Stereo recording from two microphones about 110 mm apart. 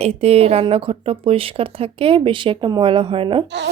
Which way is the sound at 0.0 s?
70° right (ahead or behind).